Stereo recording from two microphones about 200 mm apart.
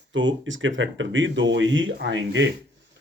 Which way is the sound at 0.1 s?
70° right (ahead or behind).